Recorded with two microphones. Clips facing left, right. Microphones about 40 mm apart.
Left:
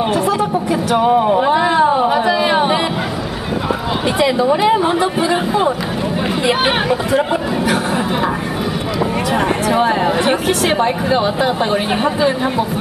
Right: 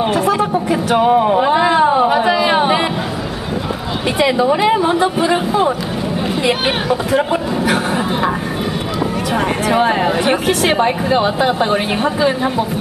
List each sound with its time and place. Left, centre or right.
0.1 s speech: centre
2.0 s a sound: centre
4.5 s speech: centre
4.7 s speech: centre
7.2 s speech: centre
9.7 s speech: centre